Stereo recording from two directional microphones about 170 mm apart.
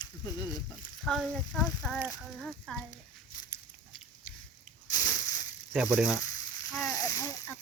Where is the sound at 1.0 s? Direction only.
Centre (ahead or behind).